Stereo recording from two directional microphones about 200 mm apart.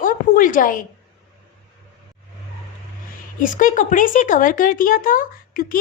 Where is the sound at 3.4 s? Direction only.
40° left (ahead or behind).